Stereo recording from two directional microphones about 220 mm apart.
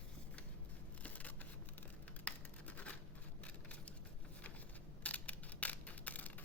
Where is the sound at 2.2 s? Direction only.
5° left (ahead or behind).